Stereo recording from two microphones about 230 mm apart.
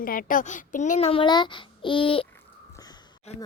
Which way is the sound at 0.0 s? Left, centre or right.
Left.